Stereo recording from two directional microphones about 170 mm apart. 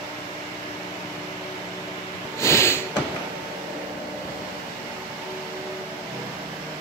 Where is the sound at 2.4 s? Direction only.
15° left (ahead or behind).